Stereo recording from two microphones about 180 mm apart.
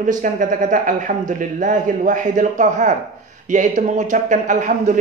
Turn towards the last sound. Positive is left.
turn(degrees=-45)  # may be behind; listen again after turning